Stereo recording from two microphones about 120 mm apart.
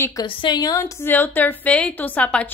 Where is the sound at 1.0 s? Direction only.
15° left (ahead or behind).